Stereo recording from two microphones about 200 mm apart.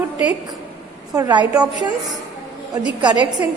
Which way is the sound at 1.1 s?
20° right (ahead or behind).